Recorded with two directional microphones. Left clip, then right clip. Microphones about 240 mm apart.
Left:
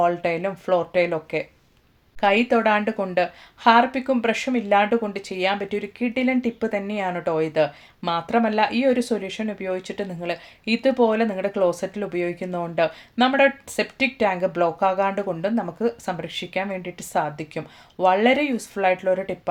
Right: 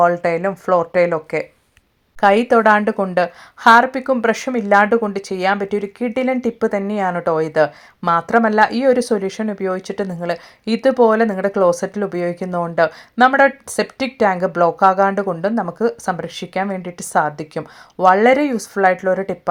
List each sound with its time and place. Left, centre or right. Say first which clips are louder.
0.6 s a woman's voice: right 5 dB; right
2.2 s a woman's voice: right 6 dB; right